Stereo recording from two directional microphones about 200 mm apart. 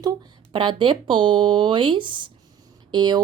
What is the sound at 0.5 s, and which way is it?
Speech, 25° right (ahead or behind).